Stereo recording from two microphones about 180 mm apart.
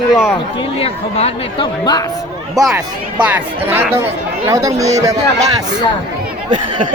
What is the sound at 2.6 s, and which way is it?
Speech, 20° right (ahead or behind).